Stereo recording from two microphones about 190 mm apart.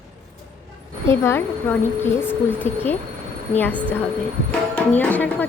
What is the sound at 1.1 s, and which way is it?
Speech, 15° left (ahead or behind).